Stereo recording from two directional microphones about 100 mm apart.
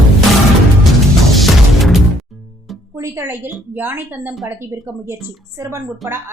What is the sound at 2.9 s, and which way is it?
A woman's voice, 30° right (ahead or behind).